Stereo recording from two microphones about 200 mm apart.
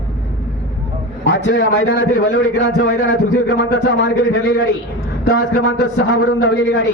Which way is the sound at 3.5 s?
70° left (ahead or behind).